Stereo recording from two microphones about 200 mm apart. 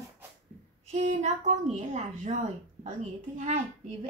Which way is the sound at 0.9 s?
35° right (ahead or behind).